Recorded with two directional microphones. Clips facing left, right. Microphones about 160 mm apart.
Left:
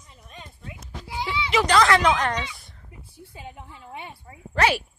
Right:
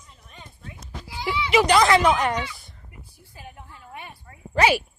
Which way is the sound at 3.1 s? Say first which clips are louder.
Left 4 dB; 25° left (ahead or behind).